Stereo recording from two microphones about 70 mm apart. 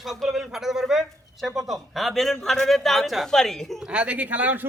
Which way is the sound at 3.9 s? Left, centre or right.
Centre.